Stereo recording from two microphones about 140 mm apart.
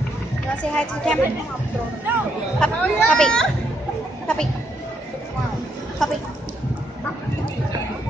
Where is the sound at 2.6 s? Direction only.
5° left (ahead or behind).